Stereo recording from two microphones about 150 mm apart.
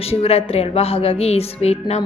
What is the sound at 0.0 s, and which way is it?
Speech, 40° left (ahead or behind).